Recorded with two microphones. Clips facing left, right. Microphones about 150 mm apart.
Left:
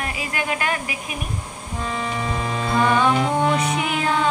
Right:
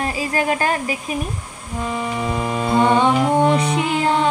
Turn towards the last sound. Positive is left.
turn(degrees=-30)  # may be behind; listen again after turning